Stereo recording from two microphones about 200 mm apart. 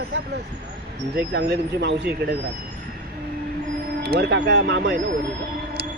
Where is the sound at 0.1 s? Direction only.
60° right (ahead or behind).